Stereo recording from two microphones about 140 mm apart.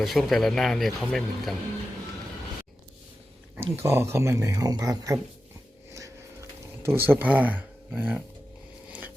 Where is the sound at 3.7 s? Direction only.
20° right (ahead or behind).